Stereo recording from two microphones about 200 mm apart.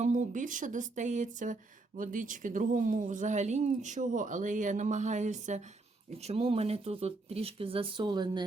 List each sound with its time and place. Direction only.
0.0 s speech: 40° right (ahead or behind); by 8.4 s 20° right (ahead or behind)